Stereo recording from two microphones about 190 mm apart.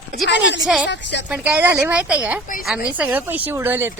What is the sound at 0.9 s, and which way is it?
Speech, 65° left (ahead or behind).